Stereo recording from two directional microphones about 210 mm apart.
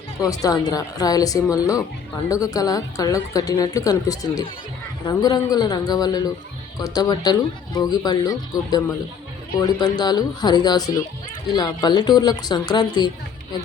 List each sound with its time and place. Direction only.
0.2 s speech: 15° left (ahead or behind)